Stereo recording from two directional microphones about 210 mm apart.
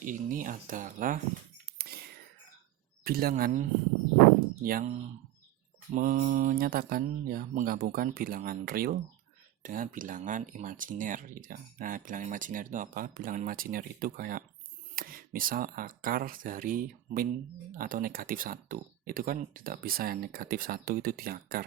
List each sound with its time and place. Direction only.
0.0 s speech: 40° right (ahead or behind)
3.0 s speech: 45° right (ahead or behind)
4.6 s speech: 45° right (ahead or behind)
5.9 s speech: 40° right (ahead or behind)